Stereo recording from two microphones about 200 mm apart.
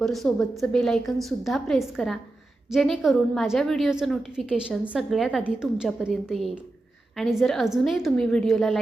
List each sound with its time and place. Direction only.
0.0 s a woman's voice: centre (ahead or behind)